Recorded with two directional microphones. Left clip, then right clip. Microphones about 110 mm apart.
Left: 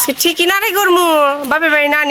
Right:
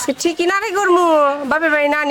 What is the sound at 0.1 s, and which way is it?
Speech, centre (ahead or behind).